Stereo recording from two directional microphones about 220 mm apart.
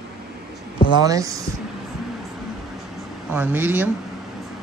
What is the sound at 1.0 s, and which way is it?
Speech, 15° right (ahead or behind).